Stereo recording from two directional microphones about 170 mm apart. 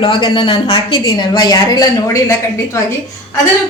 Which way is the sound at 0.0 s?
30° left (ahead or behind).